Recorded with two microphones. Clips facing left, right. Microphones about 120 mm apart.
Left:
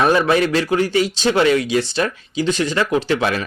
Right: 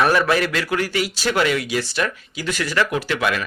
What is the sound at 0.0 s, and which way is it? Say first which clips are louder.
A man's voice: left 3 dB; 25° left (ahead or behind).